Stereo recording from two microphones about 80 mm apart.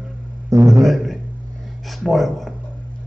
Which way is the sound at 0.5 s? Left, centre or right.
Right.